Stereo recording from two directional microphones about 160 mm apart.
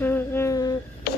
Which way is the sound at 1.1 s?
90° left.